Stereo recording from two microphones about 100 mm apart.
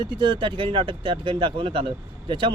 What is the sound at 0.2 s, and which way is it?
Speech, 55° right (ahead or behind).